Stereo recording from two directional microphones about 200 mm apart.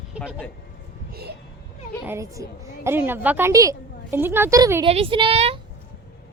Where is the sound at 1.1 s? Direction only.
50° right (ahead or behind).